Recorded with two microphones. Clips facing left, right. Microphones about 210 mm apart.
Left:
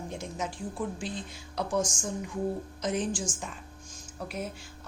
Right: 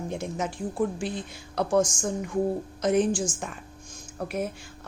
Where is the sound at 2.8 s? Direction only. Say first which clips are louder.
Right 8 dB; 60° right (ahead or behind).